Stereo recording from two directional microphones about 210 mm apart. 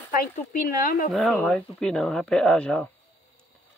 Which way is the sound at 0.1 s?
40° left (ahead or behind).